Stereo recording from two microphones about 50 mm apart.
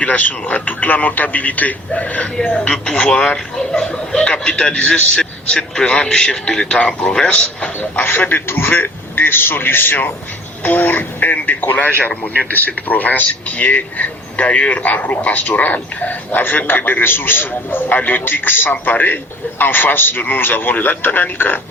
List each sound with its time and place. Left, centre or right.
0.0 s speech: left
2.5 s a man's voice: centre
8.0 s a man's voice: left